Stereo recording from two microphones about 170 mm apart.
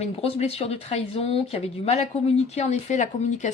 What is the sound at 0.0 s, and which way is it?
Speech, 35° left (ahead or behind).